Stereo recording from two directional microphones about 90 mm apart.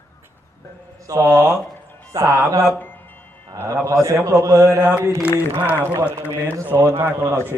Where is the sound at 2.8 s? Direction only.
20° left (ahead or behind).